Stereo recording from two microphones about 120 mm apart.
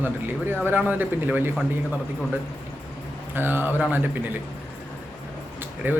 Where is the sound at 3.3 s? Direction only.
15° right (ahead or behind).